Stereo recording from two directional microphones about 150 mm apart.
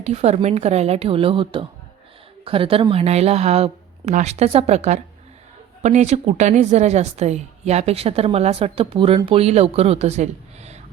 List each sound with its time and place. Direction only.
0.0 s a woman's voice: 45° right (ahead or behind)